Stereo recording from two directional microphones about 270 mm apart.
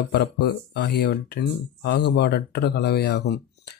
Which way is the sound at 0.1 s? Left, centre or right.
Left.